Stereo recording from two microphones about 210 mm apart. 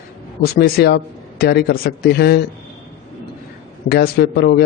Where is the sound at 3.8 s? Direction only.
50° left (ahead or behind).